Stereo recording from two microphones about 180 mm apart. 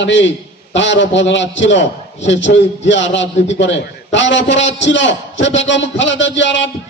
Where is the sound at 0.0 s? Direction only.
90° left.